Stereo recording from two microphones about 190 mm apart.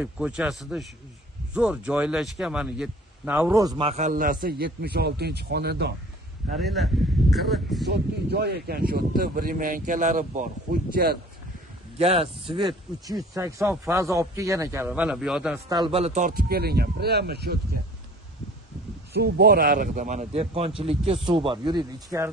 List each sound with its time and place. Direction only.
0.0 s a man's voice: 5° right (ahead or behind); by 5.9 s 60° right (ahead or behind)
6.6 s speech: centre (ahead or behind)
7.9 s speech: 60° right (ahead or behind)
12.0 s speech: 30° right (ahead or behind); by 15.6 s 5° right (ahead or behind)
15.7 s speech: 25° right (ahead or behind); by 17.6 s 55° right (ahead or behind)
19.1 s a man's voice: 60° right (ahead or behind); by 22.3 s 20° right (ahead or behind)